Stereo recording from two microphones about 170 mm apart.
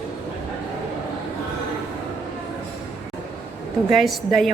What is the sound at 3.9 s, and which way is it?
Speech, centre (ahead or behind).